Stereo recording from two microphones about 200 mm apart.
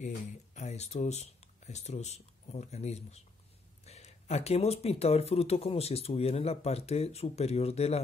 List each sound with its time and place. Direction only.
0.6 s speech: 35° left (ahead or behind)